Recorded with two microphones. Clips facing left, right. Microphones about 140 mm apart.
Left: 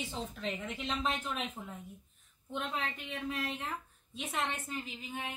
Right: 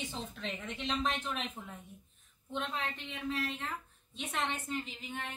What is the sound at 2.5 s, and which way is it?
Speech, 5° left (ahead or behind).